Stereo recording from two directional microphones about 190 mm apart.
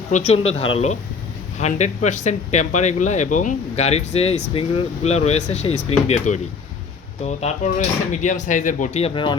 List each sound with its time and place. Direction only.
0.1 s speech: 35° left (ahead or behind)